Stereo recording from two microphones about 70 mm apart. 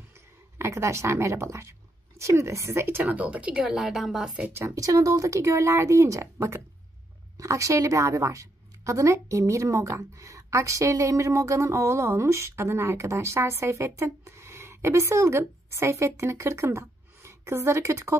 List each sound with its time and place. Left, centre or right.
0.1 s speech: right
3.1 s a woman's voice: centre
4.6 s a woman's voice: right